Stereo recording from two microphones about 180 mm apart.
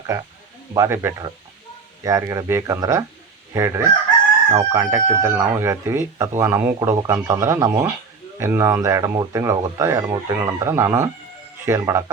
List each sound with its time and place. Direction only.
0.7 s speech: 15° right (ahead or behind)